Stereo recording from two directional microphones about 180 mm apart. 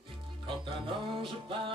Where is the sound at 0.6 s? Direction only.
30° right (ahead or behind).